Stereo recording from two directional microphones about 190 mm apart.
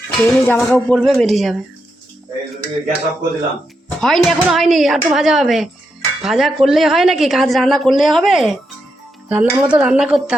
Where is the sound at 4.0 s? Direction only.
Centre (ahead or behind).